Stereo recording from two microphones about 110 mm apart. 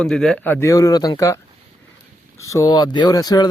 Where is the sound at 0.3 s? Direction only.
15° left (ahead or behind).